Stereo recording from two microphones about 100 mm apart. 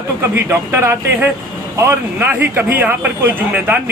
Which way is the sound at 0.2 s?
25° right (ahead or behind).